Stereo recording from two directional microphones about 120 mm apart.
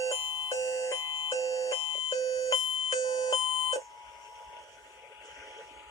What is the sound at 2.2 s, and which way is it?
Alarm, 30° left (ahead or behind).